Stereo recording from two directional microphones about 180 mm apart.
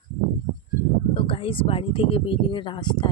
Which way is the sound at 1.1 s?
30° left (ahead or behind).